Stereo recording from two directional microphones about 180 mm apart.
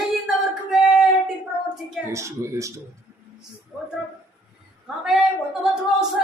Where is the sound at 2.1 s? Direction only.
15° right (ahead or behind).